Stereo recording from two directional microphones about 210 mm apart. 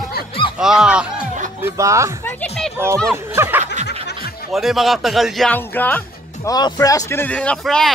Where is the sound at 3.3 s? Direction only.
10° right (ahead or behind).